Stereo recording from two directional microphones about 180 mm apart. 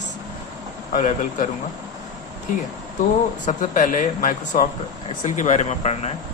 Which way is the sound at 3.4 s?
45° left (ahead or behind).